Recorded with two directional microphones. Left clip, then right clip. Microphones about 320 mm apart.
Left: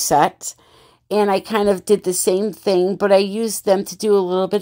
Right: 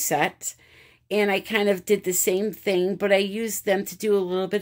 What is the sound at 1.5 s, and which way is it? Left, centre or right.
A woman's voice, centre.